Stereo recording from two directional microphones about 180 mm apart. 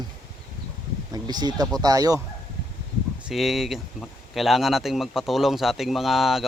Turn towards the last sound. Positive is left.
turn(degrees=0)  # may be behind; listen again after turning